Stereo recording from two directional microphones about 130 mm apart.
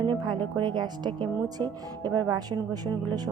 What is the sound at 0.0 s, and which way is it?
Speech, 35° right (ahead or behind).